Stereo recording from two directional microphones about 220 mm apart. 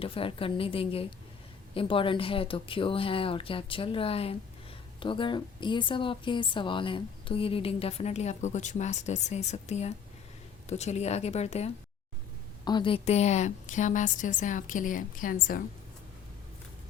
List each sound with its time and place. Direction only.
0.0 s a woman's voice: 25° left (ahead or behind)